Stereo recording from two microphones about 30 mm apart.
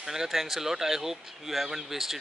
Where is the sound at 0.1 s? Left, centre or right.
Centre.